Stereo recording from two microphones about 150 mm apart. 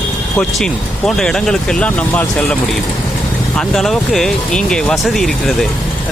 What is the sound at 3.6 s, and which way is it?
Speech, centre (ahead or behind).